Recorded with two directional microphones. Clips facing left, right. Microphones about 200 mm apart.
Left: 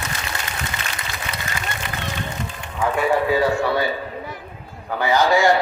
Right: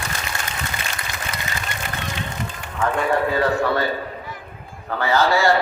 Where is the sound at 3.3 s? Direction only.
10° left (ahead or behind).